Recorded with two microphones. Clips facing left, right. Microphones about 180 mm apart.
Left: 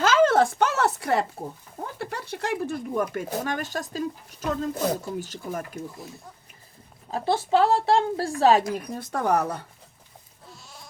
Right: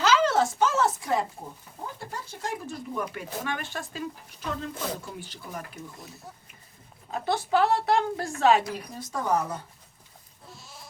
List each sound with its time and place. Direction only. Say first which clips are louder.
0.0 s a sound: left 4 dB; 50° left (ahead or behind); by 1.2 s 65° left (ahead or behind)
2.0 s speech: left 8 dB; 70° left (ahead or behind)
2.9 s speech: left 4 dB; 45° left (ahead or behind)
7.1 s a woman's voice: left 3 dB; 25° left (ahead or behind)
9.0 s speech: left 3 dB; 60° left (ahead or behind)
10.5 s goat: even; centre (ahead or behind)